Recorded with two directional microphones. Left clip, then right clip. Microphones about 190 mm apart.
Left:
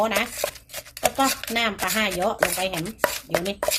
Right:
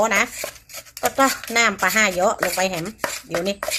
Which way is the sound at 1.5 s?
30° right (ahead or behind).